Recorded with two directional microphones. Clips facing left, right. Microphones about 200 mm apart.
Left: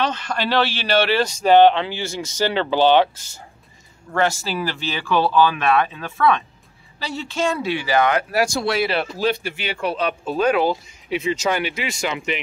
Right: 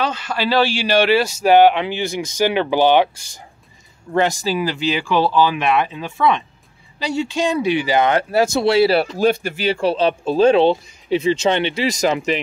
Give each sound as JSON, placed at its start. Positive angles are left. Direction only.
{"t": 0.0, "sound": "speech", "side_deg": -10}
{"t": 9.2, "sound": "speech", "side_deg": -45}